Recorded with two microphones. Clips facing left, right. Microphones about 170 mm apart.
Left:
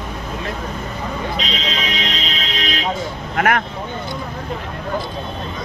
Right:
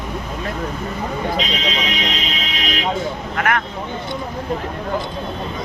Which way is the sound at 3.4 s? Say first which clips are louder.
Left 3 dB; 45° left (ahead or behind).